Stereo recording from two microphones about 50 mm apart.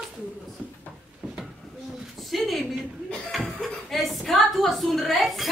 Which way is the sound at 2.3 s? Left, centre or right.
Centre.